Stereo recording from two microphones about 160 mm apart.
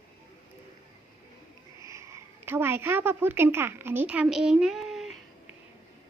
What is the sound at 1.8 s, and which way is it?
A woman's voice, 20° right (ahead or behind).